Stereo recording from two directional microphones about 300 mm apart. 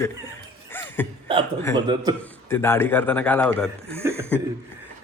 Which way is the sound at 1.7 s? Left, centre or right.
Centre.